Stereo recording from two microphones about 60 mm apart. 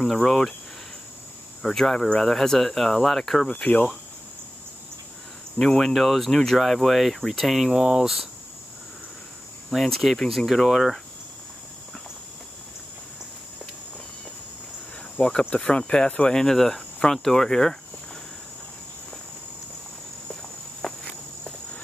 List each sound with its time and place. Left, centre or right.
0.0 s speech: centre
1.6 s speech: centre
5.6 s speech: centre
9.7 s speech: centre
15.1 s speech: centre
20.8 s insect: centre